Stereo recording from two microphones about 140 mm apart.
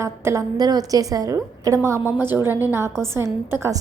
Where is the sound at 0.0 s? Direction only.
20° right (ahead or behind).